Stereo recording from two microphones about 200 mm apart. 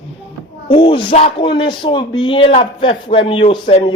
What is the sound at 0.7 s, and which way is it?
A man's voice, 25° left (ahead or behind).